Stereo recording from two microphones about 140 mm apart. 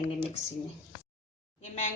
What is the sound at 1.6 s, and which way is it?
Speech, 55° left (ahead or behind).